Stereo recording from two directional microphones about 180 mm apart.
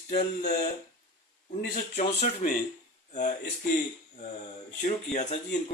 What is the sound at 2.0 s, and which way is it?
Speech, 35° left (ahead or behind).